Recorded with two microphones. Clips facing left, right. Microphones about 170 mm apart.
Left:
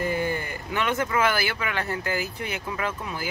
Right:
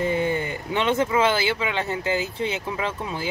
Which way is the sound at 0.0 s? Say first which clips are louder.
Right 3 dB; 20° right (ahead or behind).